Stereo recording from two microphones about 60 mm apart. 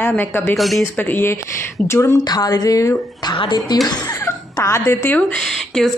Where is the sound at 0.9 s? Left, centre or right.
Left.